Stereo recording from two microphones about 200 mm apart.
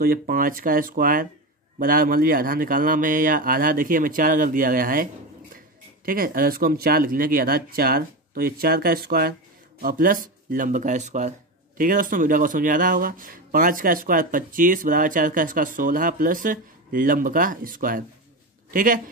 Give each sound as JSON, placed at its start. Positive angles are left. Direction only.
{"t": 0.0, "sound": "speech", "side_deg": -45}